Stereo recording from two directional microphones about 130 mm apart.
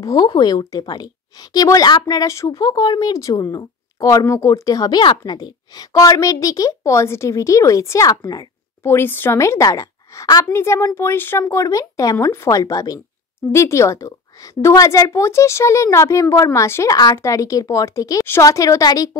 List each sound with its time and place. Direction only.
0.0 s a woman's voice: 30° left (ahead or behind)
8.9 s a woman's voice: 15° left (ahead or behind)